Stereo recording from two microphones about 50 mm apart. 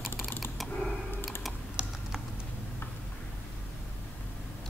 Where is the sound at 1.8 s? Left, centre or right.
Centre.